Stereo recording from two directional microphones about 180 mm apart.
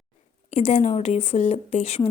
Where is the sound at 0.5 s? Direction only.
40° left (ahead or behind).